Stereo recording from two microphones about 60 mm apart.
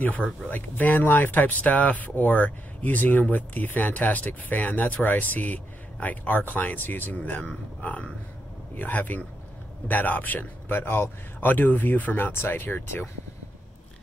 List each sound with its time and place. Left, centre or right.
0.0 s speech: left